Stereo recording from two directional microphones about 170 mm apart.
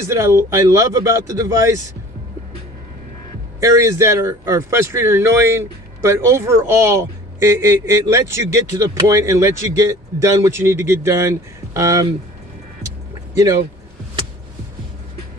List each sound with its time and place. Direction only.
0.0 s speech: 15° right (ahead or behind)
3.6 s speech: 15° right (ahead or behind)